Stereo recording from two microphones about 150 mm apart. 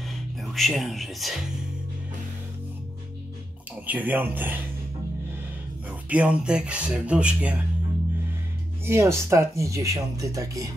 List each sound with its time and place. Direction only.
0.4 s speech: centre (ahead or behind)
3.8 s speech: 10° right (ahead or behind)
5.9 s speech: 10° right (ahead or behind)
8.8 s speech: 15° right (ahead or behind)